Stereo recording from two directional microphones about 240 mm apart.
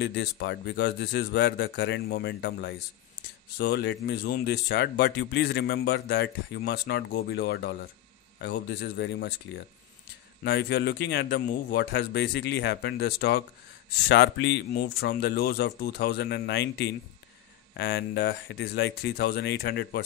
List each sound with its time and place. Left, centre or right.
0.0 s speech: left
10.4 s speech: left